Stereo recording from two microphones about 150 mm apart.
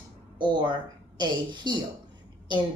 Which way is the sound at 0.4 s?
30° right (ahead or behind).